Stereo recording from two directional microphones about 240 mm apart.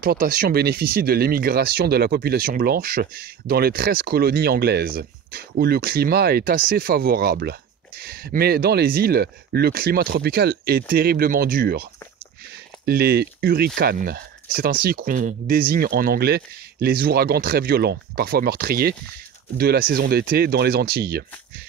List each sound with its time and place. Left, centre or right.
0.0 s speech: right